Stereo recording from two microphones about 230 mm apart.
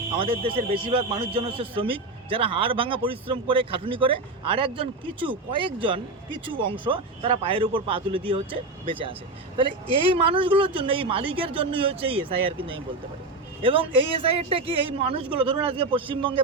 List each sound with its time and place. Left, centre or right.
0.1 s a man's voice: right